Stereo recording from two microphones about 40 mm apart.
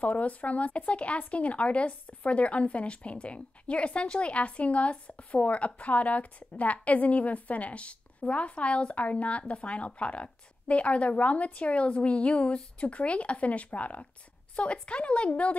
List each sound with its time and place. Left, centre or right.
0.0 s a woman's voice: left